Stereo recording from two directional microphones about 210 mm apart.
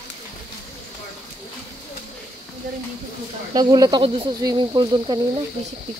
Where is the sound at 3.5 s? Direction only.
20° right (ahead or behind).